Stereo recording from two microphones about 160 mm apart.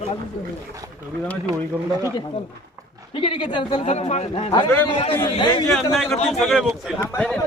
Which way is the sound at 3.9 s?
45° left (ahead or behind).